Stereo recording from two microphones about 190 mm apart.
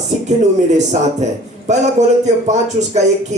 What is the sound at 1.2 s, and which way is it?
A man's voice, 40° right (ahead or behind).